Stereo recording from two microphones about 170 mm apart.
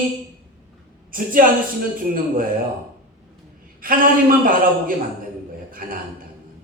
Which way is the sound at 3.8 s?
55° right (ahead or behind).